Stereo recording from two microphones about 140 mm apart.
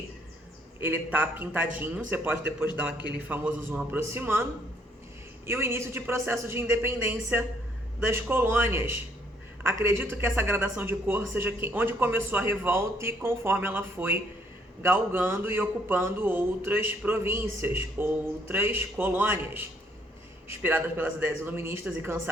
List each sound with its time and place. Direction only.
0.8 s speech: 15° right (ahead or behind)
5.5 s speech: 20° right (ahead or behind)